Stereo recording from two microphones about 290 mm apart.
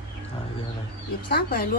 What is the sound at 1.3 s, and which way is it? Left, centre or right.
Speech, left.